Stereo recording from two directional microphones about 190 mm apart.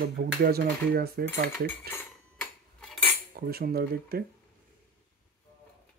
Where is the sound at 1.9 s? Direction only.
10° left (ahead or behind).